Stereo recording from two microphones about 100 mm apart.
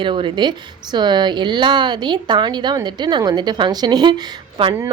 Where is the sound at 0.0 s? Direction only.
55° right (ahead or behind).